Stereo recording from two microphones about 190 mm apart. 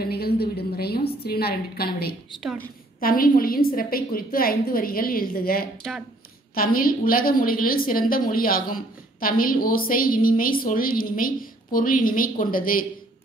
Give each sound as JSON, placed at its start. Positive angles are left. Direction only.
{"t": 0.0, "sound": "a sound", "side_deg": 55}
{"t": 1.2, "sound": "a woman's voice", "side_deg": 55}
{"t": 5.8, "sound": "speech", "side_deg": 0}
{"t": 6.5, "sound": "a woman's voice", "side_deg": 50}